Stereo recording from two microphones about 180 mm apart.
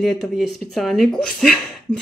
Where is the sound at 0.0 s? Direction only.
Centre (ahead or behind).